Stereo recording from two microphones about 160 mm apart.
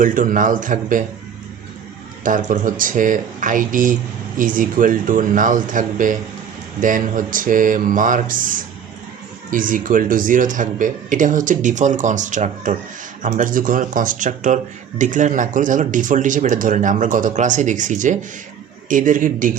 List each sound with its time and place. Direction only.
0.0 s speech: 55° right (ahead or behind)
2.2 s speech: 55° right (ahead or behind)